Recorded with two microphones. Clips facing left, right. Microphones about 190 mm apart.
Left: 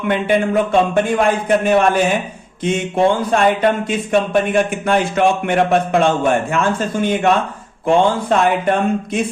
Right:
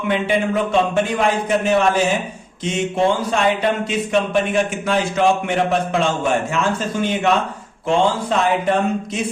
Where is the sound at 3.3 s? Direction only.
50° left (ahead or behind).